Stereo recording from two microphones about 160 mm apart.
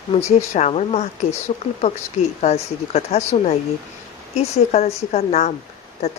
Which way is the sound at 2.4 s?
45° left (ahead or behind).